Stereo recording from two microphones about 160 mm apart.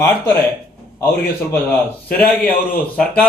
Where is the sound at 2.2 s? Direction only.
10° left (ahead or behind).